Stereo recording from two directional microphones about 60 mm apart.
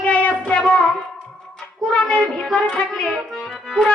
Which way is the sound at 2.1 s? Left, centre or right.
Centre.